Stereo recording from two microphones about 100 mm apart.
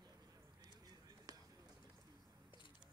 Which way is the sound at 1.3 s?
35° right (ahead or behind).